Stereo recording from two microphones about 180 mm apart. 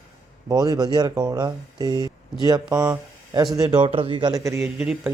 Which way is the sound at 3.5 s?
20° right (ahead or behind).